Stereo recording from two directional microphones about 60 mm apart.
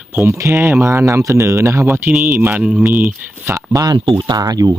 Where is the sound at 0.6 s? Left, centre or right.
Right.